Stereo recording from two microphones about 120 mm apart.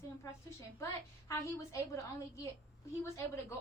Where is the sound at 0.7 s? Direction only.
25° left (ahead or behind).